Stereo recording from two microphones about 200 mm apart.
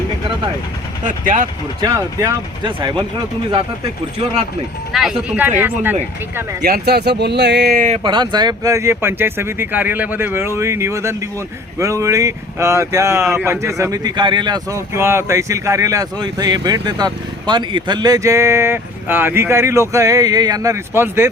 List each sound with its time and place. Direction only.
1.0 s speech: 40° right (ahead or behind)
1.8 s speech: 20° right (ahead or behind)
4.9 s speech: centre (ahead or behind)
6.6 s speech: 50° right (ahead or behind)
7.9 s speech: 20° right (ahead or behind)